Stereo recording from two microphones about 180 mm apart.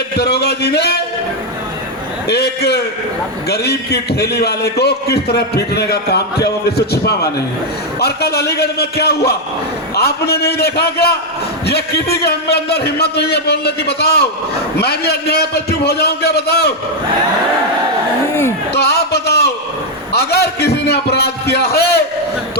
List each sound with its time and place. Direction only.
0.2 s a man's voice: 65° left (ahead or behind)
2.2 s a man's voice: 65° left (ahead or behind)
18.7 s a man's voice: 65° left (ahead or behind)